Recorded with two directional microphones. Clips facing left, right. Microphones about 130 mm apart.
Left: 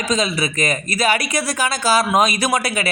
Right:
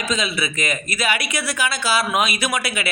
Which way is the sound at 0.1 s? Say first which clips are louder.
Left 5 dB; 40° left (ahead or behind).